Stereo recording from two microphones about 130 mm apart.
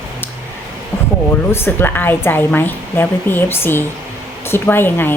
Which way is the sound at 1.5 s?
20° left (ahead or behind).